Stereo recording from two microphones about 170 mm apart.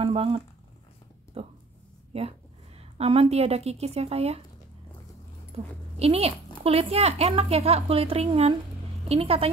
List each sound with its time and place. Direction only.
0.0 s a sound: 35° right (ahead or behind)
1.4 s a woman's voice: 35° right (ahead or behind)
5.5 s a woman's voice: 35° right (ahead or behind)